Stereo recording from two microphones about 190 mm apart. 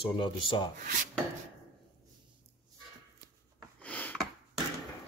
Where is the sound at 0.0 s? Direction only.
25° left (ahead or behind).